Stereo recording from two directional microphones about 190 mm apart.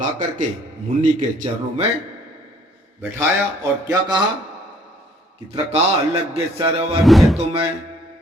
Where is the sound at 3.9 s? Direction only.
20° right (ahead or behind).